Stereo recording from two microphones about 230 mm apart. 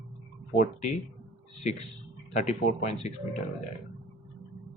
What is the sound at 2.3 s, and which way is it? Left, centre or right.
Speech, left.